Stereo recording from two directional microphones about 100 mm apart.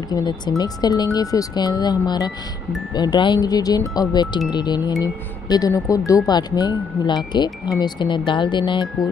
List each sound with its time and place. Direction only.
0.6 s speech: 40° left (ahead or behind)